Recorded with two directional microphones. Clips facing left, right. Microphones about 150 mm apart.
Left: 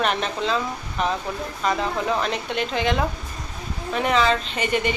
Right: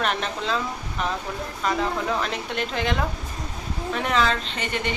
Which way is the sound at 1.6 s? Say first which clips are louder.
Left 1 dB; centre (ahead or behind).